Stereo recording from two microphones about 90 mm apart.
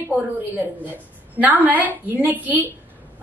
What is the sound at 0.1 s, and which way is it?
A woman's voice, 20° right (ahead or behind).